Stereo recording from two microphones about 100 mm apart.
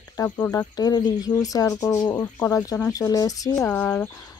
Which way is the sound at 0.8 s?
40° left (ahead or behind).